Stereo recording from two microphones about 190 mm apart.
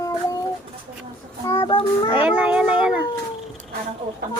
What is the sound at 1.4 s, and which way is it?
Child singing, 25° left (ahead or behind).